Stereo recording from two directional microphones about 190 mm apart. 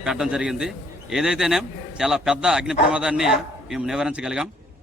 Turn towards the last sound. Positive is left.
turn(degrees=-5)  # may be behind; listen again after turning